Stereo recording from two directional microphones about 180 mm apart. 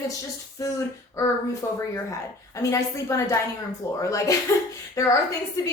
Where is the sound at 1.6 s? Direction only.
15° left (ahead or behind).